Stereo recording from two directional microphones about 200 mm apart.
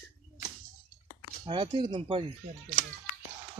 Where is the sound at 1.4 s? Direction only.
25° right (ahead or behind).